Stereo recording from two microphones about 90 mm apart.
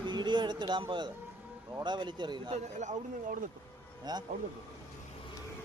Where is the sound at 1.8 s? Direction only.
55° right (ahead or behind).